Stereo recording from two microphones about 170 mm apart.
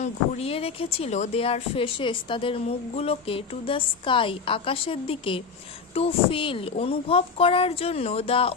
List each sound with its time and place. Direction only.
0.0 s speech: 35° left (ahead or behind)